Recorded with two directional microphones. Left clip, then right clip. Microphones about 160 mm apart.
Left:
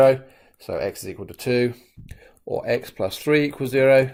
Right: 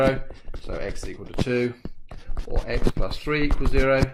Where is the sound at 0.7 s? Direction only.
45° left (ahead or behind).